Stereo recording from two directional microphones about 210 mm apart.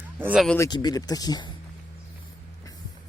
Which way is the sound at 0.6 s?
20° left (ahead or behind).